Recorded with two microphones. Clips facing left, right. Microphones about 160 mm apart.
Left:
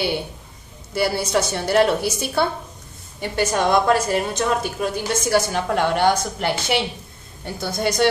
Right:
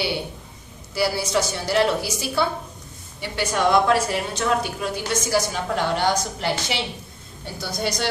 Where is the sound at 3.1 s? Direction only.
50° left (ahead or behind).